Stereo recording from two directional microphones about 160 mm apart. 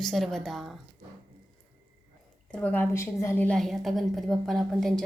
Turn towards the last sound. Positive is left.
turn(degrees=0)  # may be behind; listen again after turning